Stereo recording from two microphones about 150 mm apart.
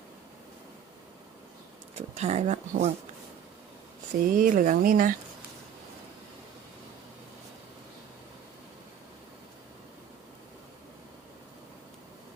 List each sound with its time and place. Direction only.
2.0 s speech: 45° right (ahead or behind)
4.2 s speech: 65° right (ahead or behind)